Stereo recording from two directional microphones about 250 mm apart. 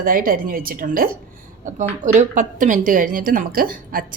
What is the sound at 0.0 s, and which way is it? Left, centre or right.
A woman's voice, right.